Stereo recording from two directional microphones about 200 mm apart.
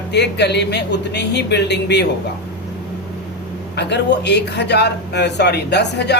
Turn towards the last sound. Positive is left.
turn(degrees=55)  # may be behind; listen again after turning